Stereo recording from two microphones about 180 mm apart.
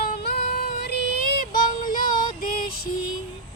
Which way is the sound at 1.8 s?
50° left (ahead or behind).